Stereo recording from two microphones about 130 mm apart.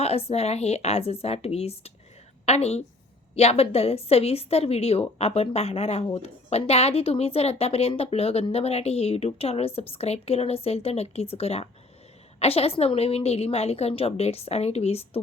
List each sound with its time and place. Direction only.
0.0 s a woman's voice: 50° left (ahead or behind)